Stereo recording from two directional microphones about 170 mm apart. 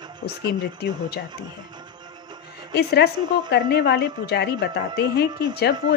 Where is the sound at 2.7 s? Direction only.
70° left (ahead or behind).